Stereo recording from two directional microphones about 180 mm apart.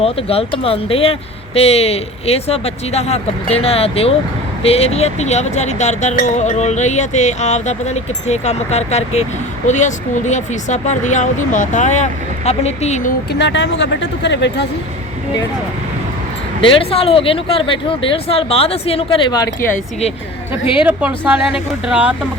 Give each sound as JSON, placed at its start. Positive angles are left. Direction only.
{"t": 0.0, "sound": "speech", "side_deg": 35}
{"t": 13.4, "sound": "speech", "side_deg": 80}
{"t": 16.6, "sound": "speech", "side_deg": 30}
{"t": 19.7, "sound": "speech", "side_deg": 35}
{"t": 20.8, "sound": "a woman's voice", "side_deg": -10}